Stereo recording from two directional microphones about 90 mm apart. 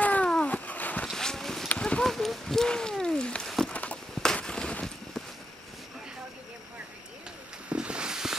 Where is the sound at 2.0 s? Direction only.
Centre (ahead or behind).